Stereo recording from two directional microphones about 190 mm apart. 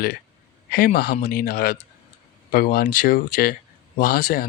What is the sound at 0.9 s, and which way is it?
Speech, 55° left (ahead or behind).